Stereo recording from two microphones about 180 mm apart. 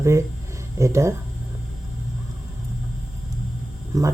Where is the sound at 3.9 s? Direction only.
20° right (ahead or behind).